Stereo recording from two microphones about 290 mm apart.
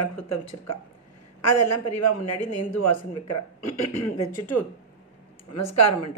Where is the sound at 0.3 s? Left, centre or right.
Left.